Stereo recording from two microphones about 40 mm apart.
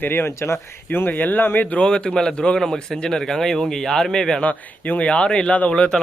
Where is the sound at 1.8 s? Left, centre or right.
Centre.